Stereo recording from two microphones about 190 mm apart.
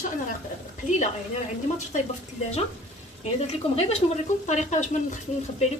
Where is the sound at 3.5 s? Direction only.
35° left (ahead or behind).